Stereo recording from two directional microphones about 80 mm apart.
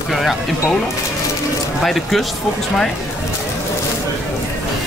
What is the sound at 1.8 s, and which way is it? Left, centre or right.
Speech, centre.